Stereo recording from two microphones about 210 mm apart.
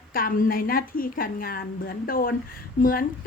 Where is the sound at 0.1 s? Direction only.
45° left (ahead or behind).